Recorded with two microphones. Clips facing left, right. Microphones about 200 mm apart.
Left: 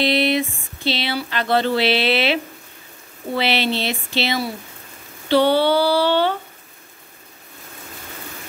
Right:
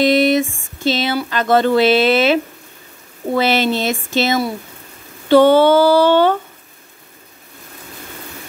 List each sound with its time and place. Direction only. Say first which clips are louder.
0.0 s speech: right 5 dB; 45° right (ahead or behind)